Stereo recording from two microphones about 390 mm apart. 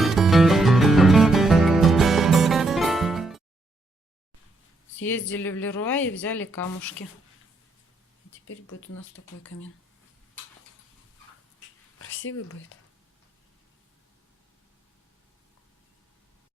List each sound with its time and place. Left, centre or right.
0.0 s music: centre
5.0 s speech: centre
11.9 s speech: left